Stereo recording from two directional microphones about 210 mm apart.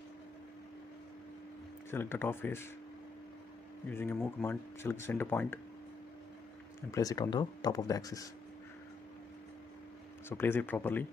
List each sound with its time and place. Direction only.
1.9 s speech: 10° left (ahead or behind)
3.9 s speech: 10° left (ahead or behind)
6.9 s speech: 15° left (ahead or behind)
10.3 s speech: 10° left (ahead or behind)